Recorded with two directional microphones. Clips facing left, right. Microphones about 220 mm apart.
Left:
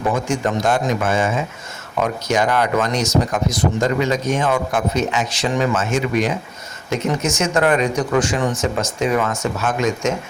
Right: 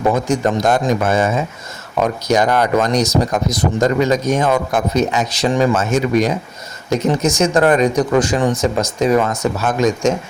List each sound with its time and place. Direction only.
0.0 s speech: 40° right (ahead or behind)